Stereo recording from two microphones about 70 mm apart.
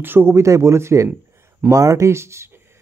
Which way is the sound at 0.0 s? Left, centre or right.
Right.